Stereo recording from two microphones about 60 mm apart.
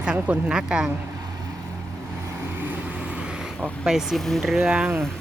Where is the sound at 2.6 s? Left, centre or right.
Right.